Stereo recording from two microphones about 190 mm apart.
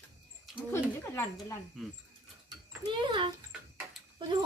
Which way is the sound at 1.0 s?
15° left (ahead or behind).